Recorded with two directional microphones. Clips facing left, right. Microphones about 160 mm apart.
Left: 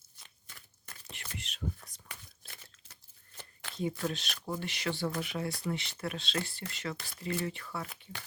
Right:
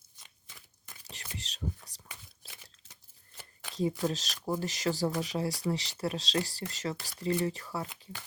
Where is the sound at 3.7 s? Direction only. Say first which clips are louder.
Right 4 dB; 35° right (ahead or behind).